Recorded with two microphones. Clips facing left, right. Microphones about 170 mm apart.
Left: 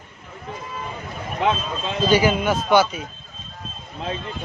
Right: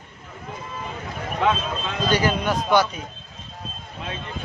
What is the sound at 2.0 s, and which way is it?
Speech, 5° left (ahead or behind).